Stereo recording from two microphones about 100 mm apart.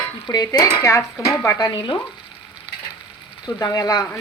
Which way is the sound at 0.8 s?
30° left (ahead or behind).